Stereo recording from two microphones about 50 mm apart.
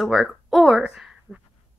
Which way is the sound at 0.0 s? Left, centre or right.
Centre.